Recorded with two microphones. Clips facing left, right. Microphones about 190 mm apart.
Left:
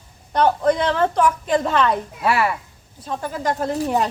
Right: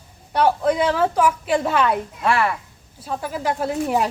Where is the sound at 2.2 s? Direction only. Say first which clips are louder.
Left 1 dB; 5° left (ahead or behind).